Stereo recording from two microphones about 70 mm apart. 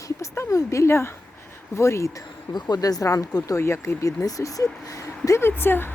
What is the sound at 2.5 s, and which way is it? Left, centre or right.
Speech, left.